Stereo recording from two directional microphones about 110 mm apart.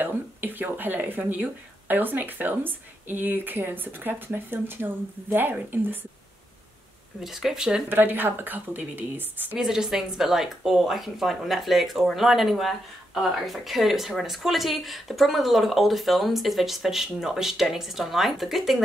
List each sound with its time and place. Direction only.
0.0 s speech: 20° right (ahead or behind)
7.2 s speech: 5° right (ahead or behind)
7.9 s speech: 20° right (ahead or behind)
9.6 s speech: 5° right (ahead or behind)